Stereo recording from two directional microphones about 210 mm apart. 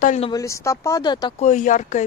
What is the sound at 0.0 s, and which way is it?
Speech, 35° left (ahead or behind).